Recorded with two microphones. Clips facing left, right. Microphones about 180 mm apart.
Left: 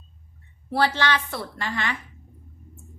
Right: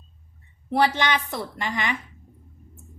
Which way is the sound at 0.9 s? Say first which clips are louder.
Even; 15° right (ahead or behind).